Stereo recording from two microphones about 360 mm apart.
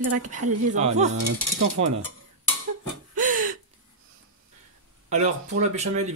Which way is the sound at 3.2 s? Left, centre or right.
Right.